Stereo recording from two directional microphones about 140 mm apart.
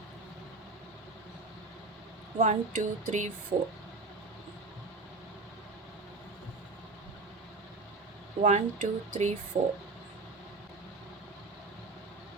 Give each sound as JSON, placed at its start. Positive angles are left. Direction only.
{"t": 2.4, "sound": "speech", "side_deg": -60}
{"t": 8.4, "sound": "speech", "side_deg": -55}